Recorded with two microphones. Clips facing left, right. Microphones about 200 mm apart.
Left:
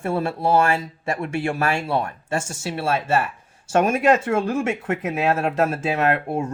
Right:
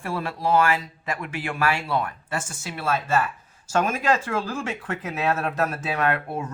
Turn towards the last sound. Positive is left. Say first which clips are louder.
# left 4 dB
turn(degrees=25)  # may be behind; listen again after turning